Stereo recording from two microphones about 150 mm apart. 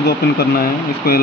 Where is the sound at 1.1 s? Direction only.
90° left.